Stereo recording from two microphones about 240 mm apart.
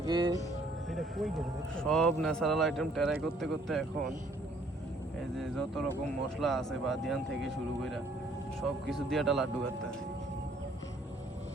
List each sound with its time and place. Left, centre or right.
0.0 s speech: centre
0.9 s a man's voice: centre
5.3 s a man's voice: centre